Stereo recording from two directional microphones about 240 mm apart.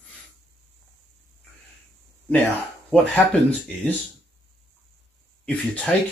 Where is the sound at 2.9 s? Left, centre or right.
Centre.